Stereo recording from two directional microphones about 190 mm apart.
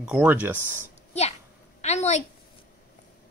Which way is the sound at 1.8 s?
35° left (ahead or behind).